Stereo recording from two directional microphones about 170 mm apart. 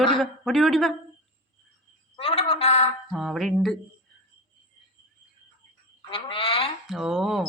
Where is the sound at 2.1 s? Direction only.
35° left (ahead or behind).